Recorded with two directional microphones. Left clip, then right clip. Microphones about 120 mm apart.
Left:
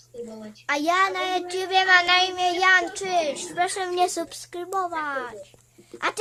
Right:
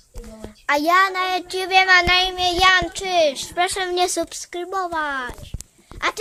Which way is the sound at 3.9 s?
25° right (ahead or behind).